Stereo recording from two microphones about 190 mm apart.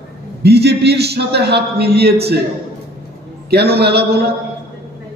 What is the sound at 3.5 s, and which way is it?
Speech, 60° right (ahead or behind).